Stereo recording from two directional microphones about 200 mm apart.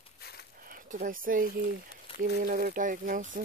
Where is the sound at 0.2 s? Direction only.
55° left (ahead or behind).